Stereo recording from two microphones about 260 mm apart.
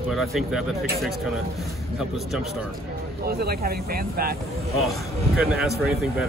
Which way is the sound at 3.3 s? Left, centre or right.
Right.